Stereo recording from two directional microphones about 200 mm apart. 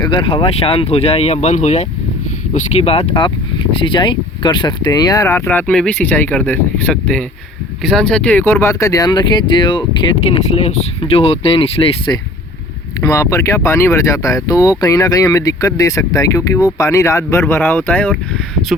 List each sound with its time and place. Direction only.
0.0 s speech: 25° left (ahead or behind); by 18.1 s 10° left (ahead or behind)